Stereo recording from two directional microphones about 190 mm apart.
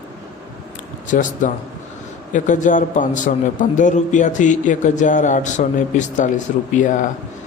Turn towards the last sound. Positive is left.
turn(degrees=40)  # may be behind; listen again after turning